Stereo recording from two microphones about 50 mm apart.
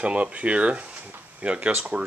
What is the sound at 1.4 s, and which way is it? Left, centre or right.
Speech, right.